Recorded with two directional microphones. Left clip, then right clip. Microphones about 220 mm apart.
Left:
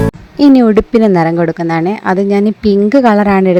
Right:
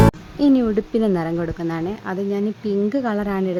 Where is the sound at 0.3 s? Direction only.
35° left (ahead or behind).